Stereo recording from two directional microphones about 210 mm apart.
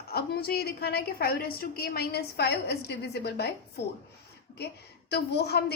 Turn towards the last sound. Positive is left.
turn(degrees=50)  # may be behind; listen again after turning